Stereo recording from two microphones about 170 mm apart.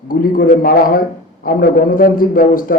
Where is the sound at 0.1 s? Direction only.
55° left (ahead or behind).